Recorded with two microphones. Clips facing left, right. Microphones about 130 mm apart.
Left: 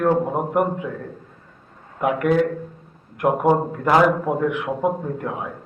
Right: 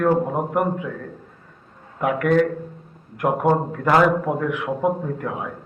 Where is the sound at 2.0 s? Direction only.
20° left (ahead or behind).